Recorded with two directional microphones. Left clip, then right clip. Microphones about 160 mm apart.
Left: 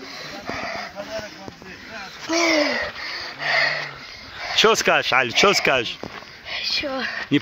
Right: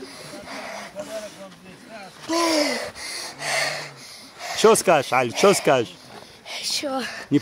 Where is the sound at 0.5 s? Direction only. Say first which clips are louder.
Left 6 dB; 50° right (ahead or behind).